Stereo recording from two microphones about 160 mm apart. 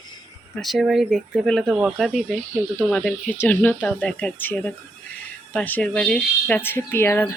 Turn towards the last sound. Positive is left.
turn(degrees=15)  # may be behind; listen again after turning